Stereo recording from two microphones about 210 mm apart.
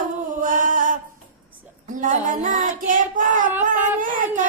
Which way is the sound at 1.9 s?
40° right (ahead or behind).